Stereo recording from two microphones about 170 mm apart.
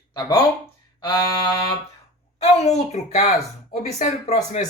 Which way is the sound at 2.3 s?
40° left (ahead or behind).